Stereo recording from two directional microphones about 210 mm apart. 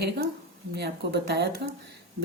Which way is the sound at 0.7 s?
50° right (ahead or behind).